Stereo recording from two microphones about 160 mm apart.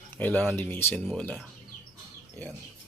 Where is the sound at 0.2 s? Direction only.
10° left (ahead or behind).